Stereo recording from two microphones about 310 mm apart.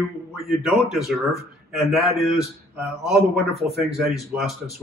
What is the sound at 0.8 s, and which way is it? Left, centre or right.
Speech, centre.